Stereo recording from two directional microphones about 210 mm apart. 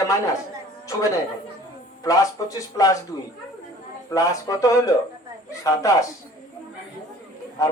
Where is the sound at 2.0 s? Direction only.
15° left (ahead or behind).